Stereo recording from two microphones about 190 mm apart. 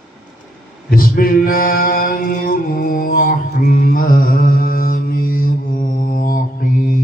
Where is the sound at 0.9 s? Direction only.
50° left (ahead or behind).